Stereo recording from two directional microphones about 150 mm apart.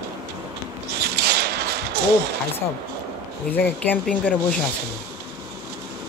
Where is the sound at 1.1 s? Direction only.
90° right.